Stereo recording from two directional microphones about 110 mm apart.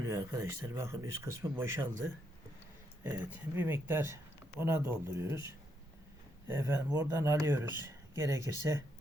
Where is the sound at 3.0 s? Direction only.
15° right (ahead or behind).